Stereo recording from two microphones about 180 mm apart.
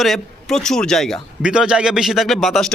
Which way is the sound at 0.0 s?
Centre (ahead or behind).